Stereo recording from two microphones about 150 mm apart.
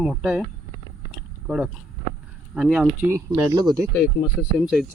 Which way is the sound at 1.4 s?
10° right (ahead or behind).